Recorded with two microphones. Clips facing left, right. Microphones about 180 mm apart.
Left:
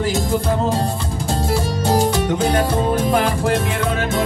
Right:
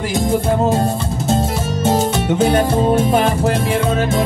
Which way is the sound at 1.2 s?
20° right (ahead or behind).